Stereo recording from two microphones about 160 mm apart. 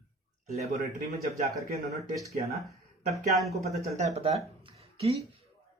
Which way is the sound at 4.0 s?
45° right (ahead or behind).